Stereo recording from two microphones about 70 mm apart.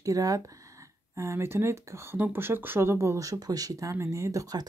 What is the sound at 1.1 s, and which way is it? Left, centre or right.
Speech, right.